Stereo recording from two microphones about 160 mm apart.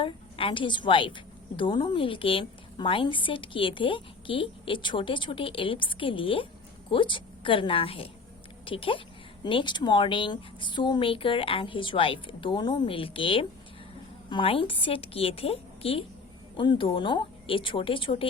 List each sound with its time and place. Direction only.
0.0 s a woman's voice: 35° left (ahead or behind)